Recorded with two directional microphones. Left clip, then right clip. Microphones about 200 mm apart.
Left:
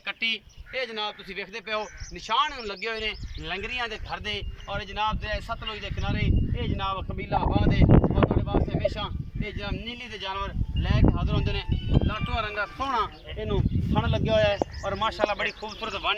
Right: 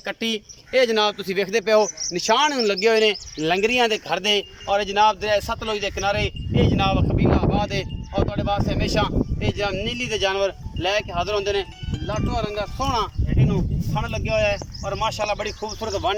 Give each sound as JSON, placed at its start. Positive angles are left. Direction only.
{"t": 0.1, "sound": "a man's voice", "side_deg": -40}